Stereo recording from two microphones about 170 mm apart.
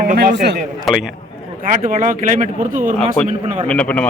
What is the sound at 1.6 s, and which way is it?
Speech, 50° right (ahead or behind).